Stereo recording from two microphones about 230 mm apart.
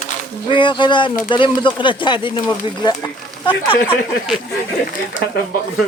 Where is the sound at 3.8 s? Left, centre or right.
Centre.